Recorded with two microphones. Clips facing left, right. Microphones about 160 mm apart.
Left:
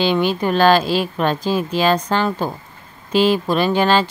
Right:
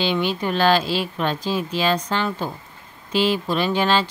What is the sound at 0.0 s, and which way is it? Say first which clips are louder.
Speech: left 5 dB; 45° left (ahead or behind).